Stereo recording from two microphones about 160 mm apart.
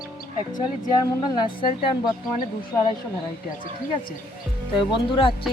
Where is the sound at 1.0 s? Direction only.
30° left (ahead or behind).